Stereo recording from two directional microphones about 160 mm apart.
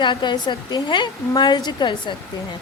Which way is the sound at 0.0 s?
30° left (ahead or behind).